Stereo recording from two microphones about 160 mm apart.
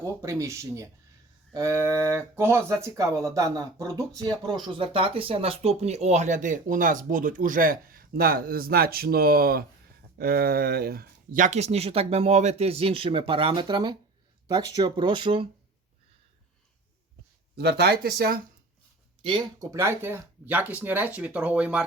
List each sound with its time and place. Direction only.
0.0 s speech: 15° right (ahead or behind)
17.6 s speech: 90° right; by 18.3 s 75° right (ahead or behind)
19.2 s speech: 25° right (ahead or behind); by 21.8 s 5° right (ahead or behind)